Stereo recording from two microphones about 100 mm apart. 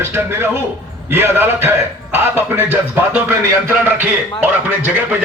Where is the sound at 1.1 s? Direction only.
20° right (ahead or behind).